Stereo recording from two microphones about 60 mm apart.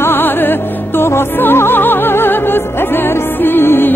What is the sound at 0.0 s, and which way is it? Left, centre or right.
Music, left.